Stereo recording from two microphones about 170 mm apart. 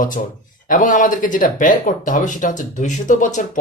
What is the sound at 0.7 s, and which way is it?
Speech, 50° left (ahead or behind).